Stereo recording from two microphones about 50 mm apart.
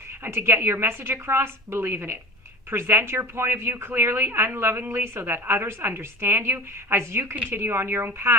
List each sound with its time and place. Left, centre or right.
0.3 s a woman's voice: right